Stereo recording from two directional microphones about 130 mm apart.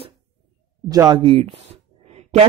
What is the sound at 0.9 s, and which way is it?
Speech, 30° right (ahead or behind).